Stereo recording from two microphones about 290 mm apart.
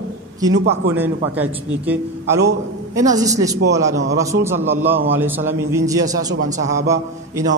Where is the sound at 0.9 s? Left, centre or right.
Centre.